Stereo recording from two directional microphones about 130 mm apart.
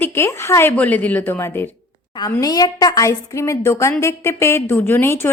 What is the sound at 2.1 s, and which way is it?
A woman's voice, 30° left (ahead or behind).